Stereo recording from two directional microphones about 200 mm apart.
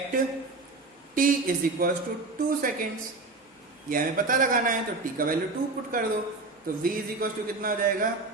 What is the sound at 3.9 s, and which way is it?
Speech, 45° right (ahead or behind).